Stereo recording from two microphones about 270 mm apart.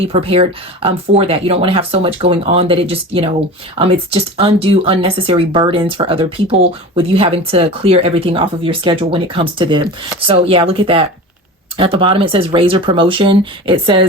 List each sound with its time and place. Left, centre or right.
0.1 s speech: right